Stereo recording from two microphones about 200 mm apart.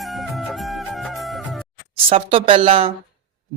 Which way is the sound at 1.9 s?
25° right (ahead or behind).